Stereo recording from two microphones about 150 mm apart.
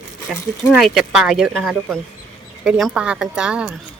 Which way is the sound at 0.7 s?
Centre (ahead or behind).